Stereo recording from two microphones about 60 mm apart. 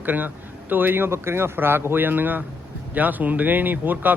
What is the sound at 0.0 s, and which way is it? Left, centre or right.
Speech, right.